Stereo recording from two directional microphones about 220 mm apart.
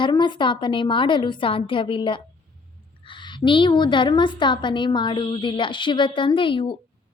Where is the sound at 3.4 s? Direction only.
20° left (ahead or behind).